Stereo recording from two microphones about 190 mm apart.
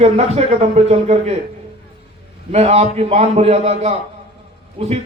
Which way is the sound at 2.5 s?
35° right (ahead or behind).